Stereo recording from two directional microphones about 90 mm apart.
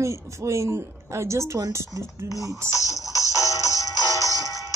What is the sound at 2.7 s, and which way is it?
Music, 35° left (ahead or behind).